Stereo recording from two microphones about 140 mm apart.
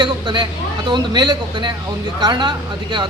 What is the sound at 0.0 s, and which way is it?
Speech, 35° right (ahead or behind).